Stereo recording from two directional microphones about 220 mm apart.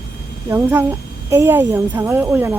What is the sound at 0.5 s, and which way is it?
Speech, 10° right (ahead or behind).